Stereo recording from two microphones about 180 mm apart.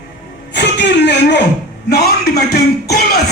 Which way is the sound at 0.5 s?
70° left (ahead or behind).